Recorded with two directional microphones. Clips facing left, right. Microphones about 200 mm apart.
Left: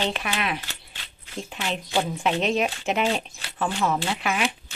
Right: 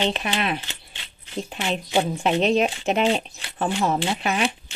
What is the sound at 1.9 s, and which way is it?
A woman's voice, 25° right (ahead or behind).